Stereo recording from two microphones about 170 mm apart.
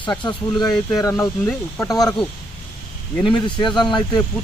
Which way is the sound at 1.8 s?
20° left (ahead or behind).